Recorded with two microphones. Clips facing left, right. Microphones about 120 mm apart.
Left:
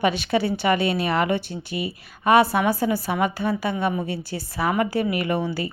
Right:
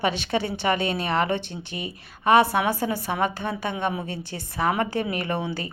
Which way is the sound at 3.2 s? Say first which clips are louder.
Left 3 dB; 10° left (ahead or behind).